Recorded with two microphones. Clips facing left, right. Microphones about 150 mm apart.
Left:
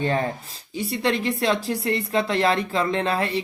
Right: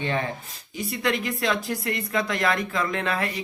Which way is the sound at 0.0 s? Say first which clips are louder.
Left 4 dB; 40° left (ahead or behind).